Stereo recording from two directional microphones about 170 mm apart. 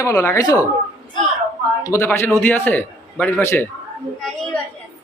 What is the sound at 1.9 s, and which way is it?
Speech, 15° left (ahead or behind).